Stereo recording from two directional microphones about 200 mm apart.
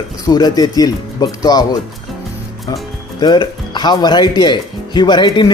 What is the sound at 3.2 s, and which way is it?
Speech, 20° left (ahead or behind).